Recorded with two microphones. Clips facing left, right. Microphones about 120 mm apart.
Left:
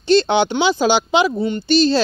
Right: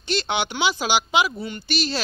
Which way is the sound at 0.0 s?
30° left (ahead or behind).